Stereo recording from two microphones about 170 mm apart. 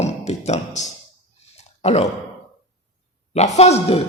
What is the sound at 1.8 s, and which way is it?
Sigh, 40° left (ahead or behind).